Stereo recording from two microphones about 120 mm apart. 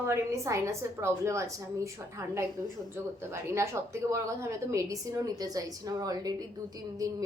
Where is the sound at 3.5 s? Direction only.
25° right (ahead or behind).